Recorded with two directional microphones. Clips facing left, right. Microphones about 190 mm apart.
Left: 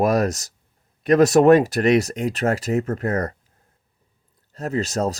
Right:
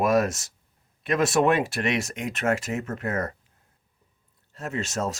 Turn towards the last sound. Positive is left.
turn(degrees=35)  # may be behind; listen again after turning